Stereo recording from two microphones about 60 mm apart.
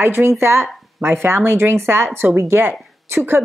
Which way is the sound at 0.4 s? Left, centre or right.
Right.